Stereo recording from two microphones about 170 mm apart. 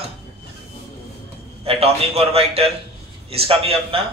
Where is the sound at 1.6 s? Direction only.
35° right (ahead or behind).